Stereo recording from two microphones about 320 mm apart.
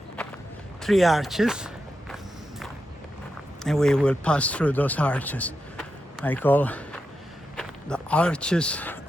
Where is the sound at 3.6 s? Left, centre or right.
Centre.